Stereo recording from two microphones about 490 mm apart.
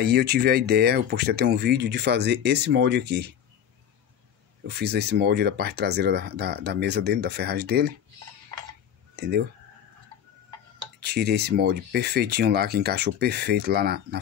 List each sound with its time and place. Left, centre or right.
0.0 s speech: centre
4.6 s speech: centre
9.1 s a sound: centre
11.0 s speech: centre